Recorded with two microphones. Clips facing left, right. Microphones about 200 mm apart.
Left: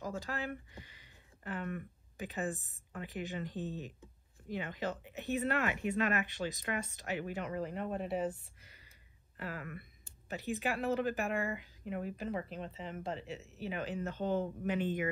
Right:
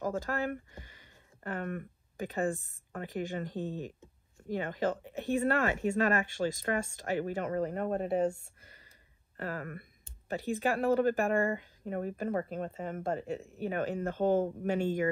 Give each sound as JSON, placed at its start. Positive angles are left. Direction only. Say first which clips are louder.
{"t": 0.0, "sound": "speech", "louder": "right 7 dB", "side_deg": -50}
{"t": 8.4, "sound": "a sound", "louder": "right 3 dB", "side_deg": -45}
{"t": 9.4, "sound": "speech", "louder": "right 5 dB", "side_deg": -45}